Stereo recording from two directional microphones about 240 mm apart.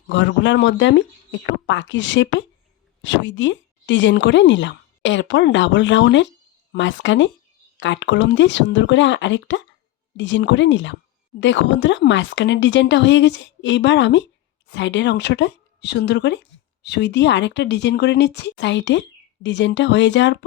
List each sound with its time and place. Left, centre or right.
0.1 s speech: left